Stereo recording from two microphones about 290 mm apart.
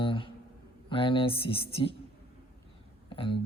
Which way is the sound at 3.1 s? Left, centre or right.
Centre.